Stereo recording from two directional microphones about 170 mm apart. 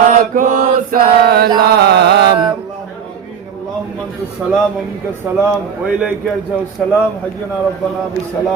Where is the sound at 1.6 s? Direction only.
75° right (ahead or behind).